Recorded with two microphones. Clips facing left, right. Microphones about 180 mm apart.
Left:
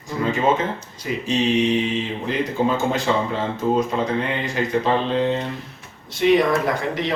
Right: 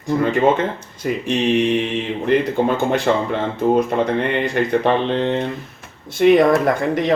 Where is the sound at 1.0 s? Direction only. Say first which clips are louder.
Right 3 dB; 60° right (ahead or behind).